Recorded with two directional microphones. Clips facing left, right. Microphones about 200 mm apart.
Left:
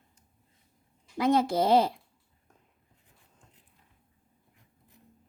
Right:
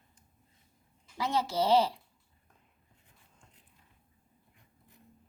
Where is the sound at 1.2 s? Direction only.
50° left (ahead or behind).